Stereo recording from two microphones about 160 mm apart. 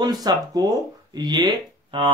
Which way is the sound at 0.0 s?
25° right (ahead or behind).